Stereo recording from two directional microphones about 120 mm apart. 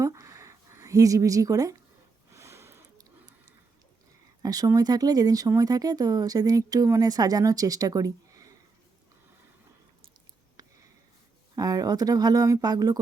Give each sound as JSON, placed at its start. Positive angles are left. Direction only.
{"t": 0.0, "sound": "a sound", "side_deg": -25}
{"t": 2.3, "sound": "sniff", "side_deg": -25}
{"t": 4.4, "sound": "speech", "side_deg": -30}
{"t": 11.5, "sound": "speech", "side_deg": -30}